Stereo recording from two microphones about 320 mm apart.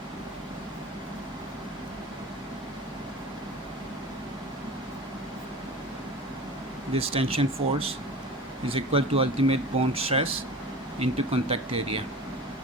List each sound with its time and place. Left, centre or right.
6.9 s speech: centre